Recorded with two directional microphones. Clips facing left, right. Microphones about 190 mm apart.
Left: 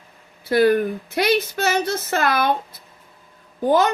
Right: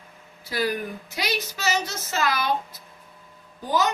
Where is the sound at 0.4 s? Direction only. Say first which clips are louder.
Left 11 dB; 60° left (ahead or behind).